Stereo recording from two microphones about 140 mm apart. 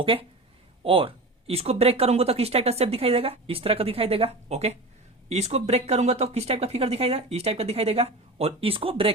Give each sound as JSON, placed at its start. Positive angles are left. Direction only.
{"t": 0.0, "sound": "speech", "side_deg": -40}